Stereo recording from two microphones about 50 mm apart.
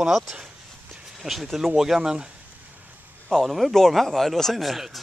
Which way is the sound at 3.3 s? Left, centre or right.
Centre.